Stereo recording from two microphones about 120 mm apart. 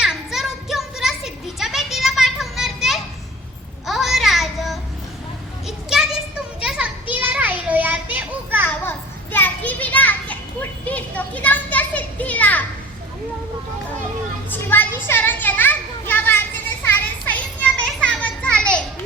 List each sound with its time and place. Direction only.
0.0 s a sound: 5° right (ahead or behind)
5.6 s children playing: 5° right (ahead or behind)
8.8 s children playing: 15° left (ahead or behind)
14.5 s children playing: 15° left (ahead or behind)